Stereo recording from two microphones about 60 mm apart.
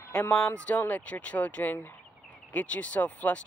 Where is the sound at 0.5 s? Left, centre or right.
Left.